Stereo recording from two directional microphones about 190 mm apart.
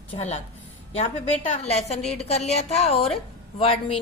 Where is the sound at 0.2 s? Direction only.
35° left (ahead or behind).